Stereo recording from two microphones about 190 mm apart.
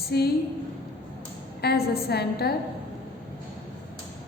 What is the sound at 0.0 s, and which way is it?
Speech, 55° left (ahead or behind).